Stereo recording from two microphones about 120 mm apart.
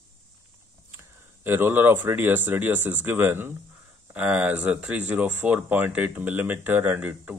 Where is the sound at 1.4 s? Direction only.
15° right (ahead or behind).